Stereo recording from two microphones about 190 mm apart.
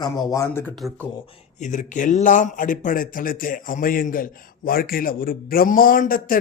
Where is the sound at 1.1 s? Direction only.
30° left (ahead or behind).